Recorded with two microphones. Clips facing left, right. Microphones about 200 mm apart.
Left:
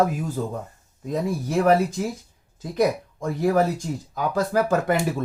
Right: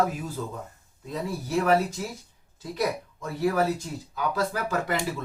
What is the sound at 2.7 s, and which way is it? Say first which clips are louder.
Speech: left 7 dB; 50° left (ahead or behind).